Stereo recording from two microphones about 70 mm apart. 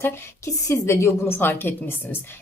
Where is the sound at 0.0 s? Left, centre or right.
Left.